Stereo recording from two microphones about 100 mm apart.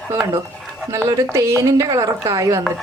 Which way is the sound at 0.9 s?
30° right (ahead or behind).